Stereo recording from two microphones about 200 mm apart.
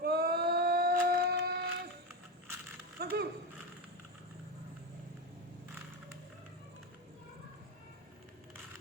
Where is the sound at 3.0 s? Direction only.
50° right (ahead or behind).